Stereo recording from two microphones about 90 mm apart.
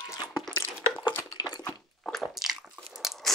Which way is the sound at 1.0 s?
50° left (ahead or behind).